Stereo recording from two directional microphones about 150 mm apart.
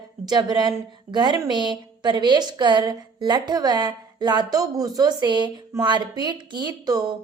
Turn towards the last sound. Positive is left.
turn(degrees=-25)  # may be behind; listen again after turning